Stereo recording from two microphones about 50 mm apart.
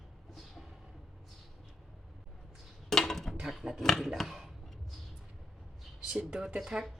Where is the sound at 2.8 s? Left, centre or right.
Centre.